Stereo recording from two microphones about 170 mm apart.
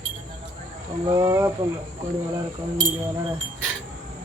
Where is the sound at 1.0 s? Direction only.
20° right (ahead or behind).